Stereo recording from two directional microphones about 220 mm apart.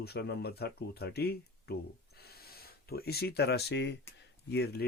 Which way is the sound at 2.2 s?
45° left (ahead or behind).